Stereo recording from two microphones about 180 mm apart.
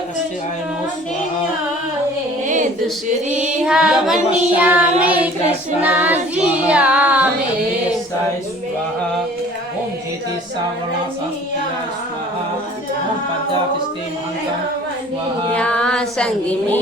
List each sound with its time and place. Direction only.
3.7 s child singing: 5° right (ahead or behind)
15.5 s music: 5° left (ahead or behind)